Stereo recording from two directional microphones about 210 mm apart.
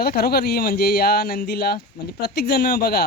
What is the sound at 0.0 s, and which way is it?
Speech, 45° left (ahead or behind).